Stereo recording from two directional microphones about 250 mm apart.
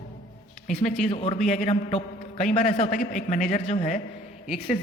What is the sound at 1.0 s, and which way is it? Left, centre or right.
A man's voice, left.